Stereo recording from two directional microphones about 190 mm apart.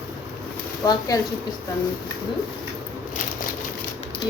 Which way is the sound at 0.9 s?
20° left (ahead or behind).